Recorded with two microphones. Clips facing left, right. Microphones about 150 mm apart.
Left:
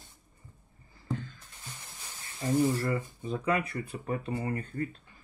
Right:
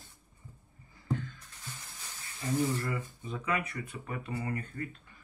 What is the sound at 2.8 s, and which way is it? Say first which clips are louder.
Speech: left 5 dB; 35° left (ahead or behind).